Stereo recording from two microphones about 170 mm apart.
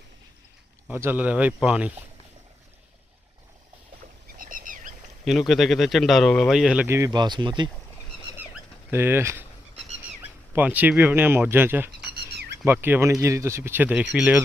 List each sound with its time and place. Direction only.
0.9 s speech: 10° right (ahead or behind)
4.4 s a sound: 50° right (ahead or behind)
5.2 s speech: centre (ahead or behind); by 7.7 s 25° right (ahead or behind)
8.4 s fowl: 10° right (ahead or behind)
10.5 s speech: 10° right (ahead or behind)
12.1 s a sound: 70° right (ahead or behind)
12.6 s speech: 10° right (ahead or behind)